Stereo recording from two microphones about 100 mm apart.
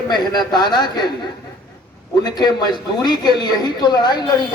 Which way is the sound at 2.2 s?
45° left (ahead or behind).